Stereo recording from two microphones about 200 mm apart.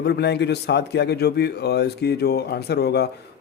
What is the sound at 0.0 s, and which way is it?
A man's voice, 55° left (ahead or behind).